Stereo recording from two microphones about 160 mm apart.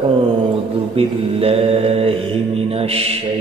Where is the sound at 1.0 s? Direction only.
35° right (ahead or behind).